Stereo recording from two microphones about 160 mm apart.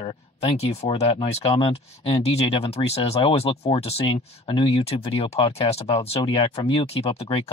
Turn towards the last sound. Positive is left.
turn(degrees=40)  # may be behind; listen again after turning